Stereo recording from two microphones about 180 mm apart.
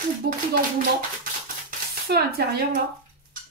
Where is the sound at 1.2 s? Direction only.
55° right (ahead or behind).